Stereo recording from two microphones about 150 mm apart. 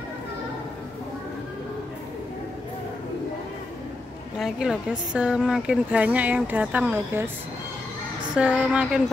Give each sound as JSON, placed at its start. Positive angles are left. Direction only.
{"t": 4.4, "sound": "speech", "side_deg": 0}
{"t": 8.4, "sound": "speech", "side_deg": -5}